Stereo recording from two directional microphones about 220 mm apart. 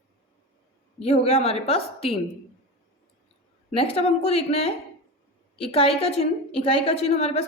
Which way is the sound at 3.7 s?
25° left (ahead or behind).